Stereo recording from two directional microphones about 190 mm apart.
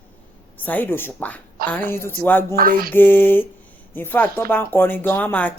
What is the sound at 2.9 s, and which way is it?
Speech, 10° left (ahead or behind).